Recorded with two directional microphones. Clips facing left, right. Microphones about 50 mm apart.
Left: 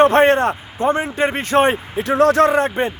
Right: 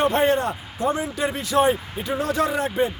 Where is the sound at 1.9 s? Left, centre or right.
Left.